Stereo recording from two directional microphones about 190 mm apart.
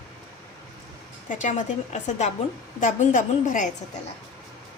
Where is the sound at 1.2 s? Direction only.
40° left (ahead or behind).